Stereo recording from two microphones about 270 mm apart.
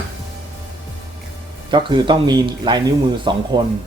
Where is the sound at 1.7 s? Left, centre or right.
Centre.